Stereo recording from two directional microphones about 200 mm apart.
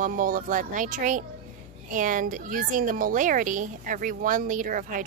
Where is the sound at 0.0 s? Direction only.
40° right (ahead or behind).